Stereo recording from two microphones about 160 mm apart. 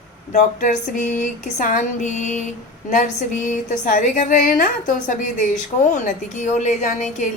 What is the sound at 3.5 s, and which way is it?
A woman's voice, 60° left (ahead or behind).